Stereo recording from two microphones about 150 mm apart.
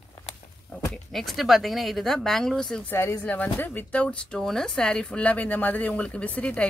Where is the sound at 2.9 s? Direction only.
15° left (ahead or behind).